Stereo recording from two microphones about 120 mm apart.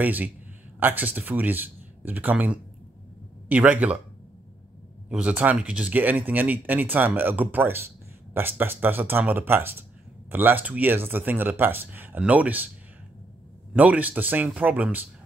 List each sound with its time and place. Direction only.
0.0 s speech: 15° right (ahead or behind)
5.1 s speech: 10° right (ahead or behind)
13.7 s speech: 15° right (ahead or behind)